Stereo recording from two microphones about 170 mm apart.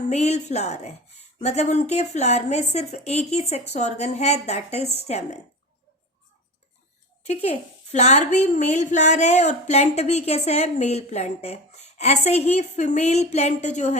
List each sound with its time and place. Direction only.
0.1 s speech: 40° left (ahead or behind)
7.9 s speech: 40° left (ahead or behind)